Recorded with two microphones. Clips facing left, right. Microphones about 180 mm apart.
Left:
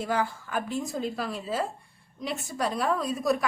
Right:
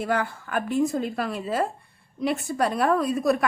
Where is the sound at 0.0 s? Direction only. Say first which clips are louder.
Right 2 dB; 60° right (ahead or behind).